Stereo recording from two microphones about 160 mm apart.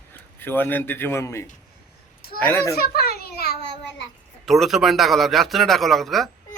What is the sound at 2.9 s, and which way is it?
Children playing, 75° left (ahead or behind).